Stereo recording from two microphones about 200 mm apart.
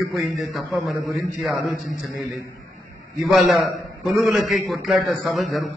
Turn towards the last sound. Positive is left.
turn(degrees=0)  # may be behind; listen again after turning